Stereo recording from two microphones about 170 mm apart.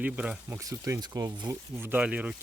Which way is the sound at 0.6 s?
20° right (ahead or behind).